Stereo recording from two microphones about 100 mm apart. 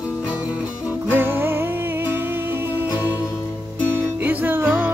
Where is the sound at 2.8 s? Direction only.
45° left (ahead or behind).